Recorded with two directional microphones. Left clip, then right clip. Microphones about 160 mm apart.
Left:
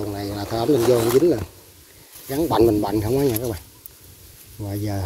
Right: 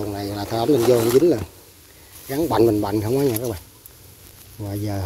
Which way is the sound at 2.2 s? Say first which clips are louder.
Even; centre (ahead or behind).